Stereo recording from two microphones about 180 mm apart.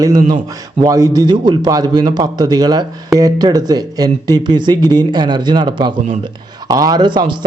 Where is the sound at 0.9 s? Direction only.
20° right (ahead or behind).